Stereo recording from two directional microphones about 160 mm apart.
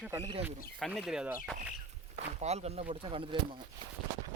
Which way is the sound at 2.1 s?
45° right (ahead or behind).